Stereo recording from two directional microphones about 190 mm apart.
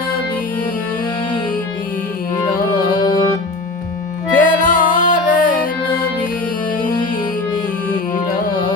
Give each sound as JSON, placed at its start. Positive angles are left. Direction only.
{"t": 3.0, "sound": "music", "side_deg": 20}
{"t": 4.4, "sound": "music", "side_deg": 45}